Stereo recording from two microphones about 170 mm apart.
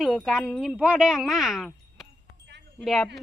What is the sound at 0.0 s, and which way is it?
Speech, centre (ahead or behind).